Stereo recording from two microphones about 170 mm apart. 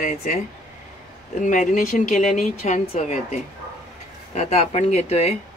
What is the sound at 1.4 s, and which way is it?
Speech, 50° left (ahead or behind).